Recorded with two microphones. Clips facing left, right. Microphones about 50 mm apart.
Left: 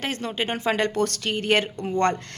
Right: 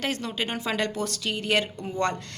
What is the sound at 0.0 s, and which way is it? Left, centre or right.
Speech, left.